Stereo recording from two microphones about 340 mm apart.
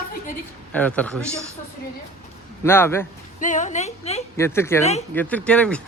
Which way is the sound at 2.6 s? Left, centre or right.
Centre.